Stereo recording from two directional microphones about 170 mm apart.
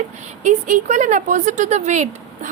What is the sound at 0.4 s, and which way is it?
A woman's voice, 45° right (ahead or behind).